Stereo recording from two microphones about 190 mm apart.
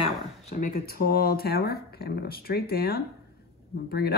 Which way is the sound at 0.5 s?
45° left (ahead or behind).